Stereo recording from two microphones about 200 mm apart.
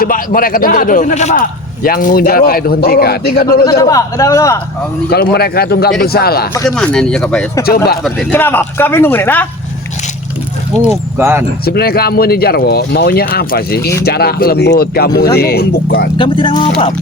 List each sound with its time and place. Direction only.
0.0 s a man's voice: 45° left (ahead or behind)
3.7 s speech: 15° left (ahead or behind)
5.0 s a man's voice: 50° left (ahead or behind)
6.5 s speech: 15° left (ahead or behind)
6.7 s speech: 5° left (ahead or behind)
10.8 s speech: 10° right (ahead or behind)
11.6 s a man's voice: 50° left (ahead or behind)
16.1 s speech: 25° left (ahead or behind)